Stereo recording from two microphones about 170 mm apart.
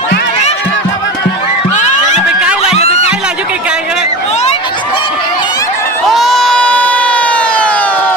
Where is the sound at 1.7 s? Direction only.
45° left (ahead or behind).